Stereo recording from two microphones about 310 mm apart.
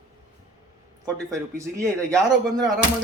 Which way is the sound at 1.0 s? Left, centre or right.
Centre.